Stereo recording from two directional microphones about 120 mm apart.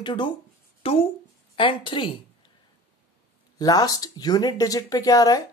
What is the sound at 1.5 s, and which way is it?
Speech, 45° left (ahead or behind).